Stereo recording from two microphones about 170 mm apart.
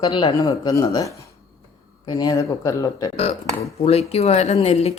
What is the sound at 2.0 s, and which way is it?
Speech, 25° left (ahead or behind).